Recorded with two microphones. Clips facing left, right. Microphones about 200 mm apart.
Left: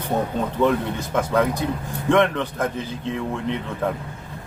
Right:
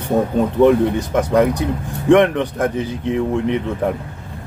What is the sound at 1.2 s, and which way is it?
Speech, 15° right (ahead or behind).